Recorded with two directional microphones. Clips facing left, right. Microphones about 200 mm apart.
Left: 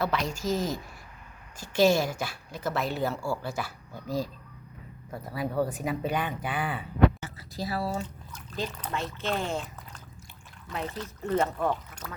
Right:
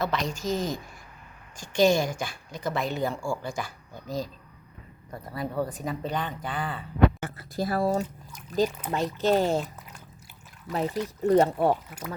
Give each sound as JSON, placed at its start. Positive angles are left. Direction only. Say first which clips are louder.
{"t": 0.0, "sound": "speech", "louder": "even", "side_deg": 5}
{"t": 7.2, "sound": "speech", "louder": "right 5 dB", "side_deg": -55}
{"t": 8.0, "sound": "a sound", "louder": "right 2 dB", "side_deg": -10}
{"t": 8.9, "sound": "speech", "louder": "right 7 dB", "side_deg": -35}
{"t": 10.8, "sound": "speech", "louder": "right 7 dB", "side_deg": -10}
{"t": 11.3, "sound": "speech", "louder": "right 6 dB", "side_deg": -35}